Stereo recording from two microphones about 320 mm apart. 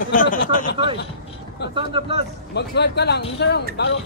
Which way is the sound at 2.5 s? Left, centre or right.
Left.